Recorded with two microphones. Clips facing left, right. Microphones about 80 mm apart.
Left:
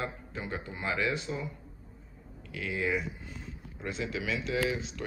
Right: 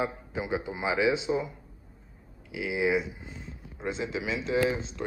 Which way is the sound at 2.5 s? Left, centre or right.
Centre.